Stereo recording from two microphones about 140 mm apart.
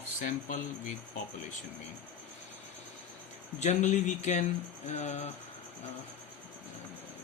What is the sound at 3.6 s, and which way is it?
Speech, 55° left (ahead or behind).